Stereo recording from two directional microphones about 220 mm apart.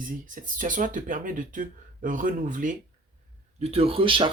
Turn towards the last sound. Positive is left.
turn(degrees=-25)  # may be behind; listen again after turning